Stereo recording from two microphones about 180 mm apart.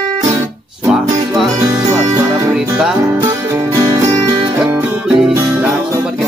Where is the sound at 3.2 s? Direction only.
15° right (ahead or behind).